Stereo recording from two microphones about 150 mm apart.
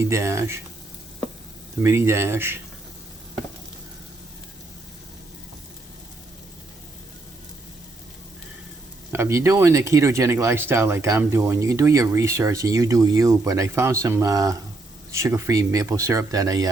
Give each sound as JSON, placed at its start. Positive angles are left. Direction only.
{"t": 0.0, "sound": "speech", "side_deg": -20}
{"t": 1.8, "sound": "speech", "side_deg": -15}
{"t": 9.1, "sound": "speech", "side_deg": -20}